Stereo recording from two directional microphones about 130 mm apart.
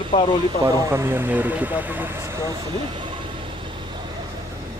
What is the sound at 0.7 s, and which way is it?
Speech, 20° right (ahead or behind).